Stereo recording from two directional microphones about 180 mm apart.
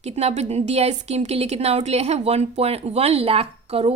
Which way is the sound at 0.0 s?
35° right (ahead or behind).